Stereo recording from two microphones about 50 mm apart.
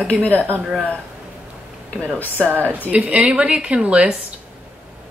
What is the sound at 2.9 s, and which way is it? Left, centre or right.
Speech, right.